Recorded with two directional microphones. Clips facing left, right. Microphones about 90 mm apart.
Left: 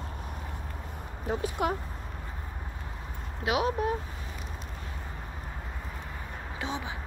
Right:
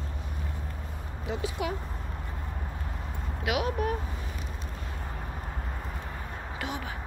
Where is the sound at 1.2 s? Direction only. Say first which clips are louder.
Left 3 dB; 45° left (ahead or behind).